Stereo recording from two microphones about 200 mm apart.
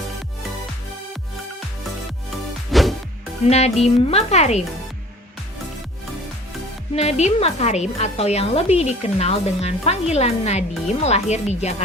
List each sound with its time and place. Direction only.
2.7 s music: centre (ahead or behind)
3.4 s a woman's voice: 30° left (ahead or behind)
6.9 s a woman's voice: 35° left (ahead or behind)